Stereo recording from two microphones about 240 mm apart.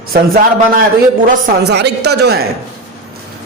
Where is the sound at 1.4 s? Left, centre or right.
Right.